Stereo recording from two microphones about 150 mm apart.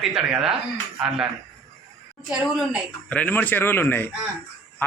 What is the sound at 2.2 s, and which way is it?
Speech, 5° right (ahead or behind).